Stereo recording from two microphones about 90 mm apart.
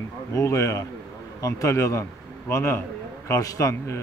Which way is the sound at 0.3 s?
35° left (ahead or behind).